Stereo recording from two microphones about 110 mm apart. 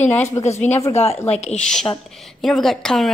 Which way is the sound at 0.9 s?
70° left (ahead or behind).